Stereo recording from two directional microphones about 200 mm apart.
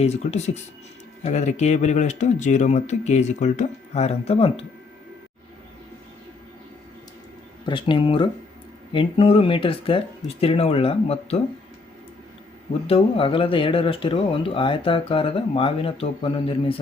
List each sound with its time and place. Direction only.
0.0 s speech: 35° left (ahead or behind)
7.6 s speech: 25° left (ahead or behind)
12.9 s speech: 25° left (ahead or behind)